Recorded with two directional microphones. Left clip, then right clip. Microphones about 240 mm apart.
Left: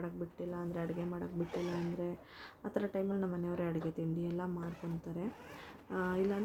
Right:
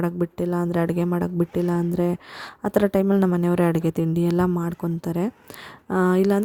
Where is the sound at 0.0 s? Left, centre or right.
Right.